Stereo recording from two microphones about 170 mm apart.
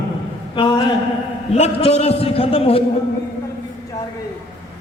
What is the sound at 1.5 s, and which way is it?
A man's voice, 40° left (ahead or behind).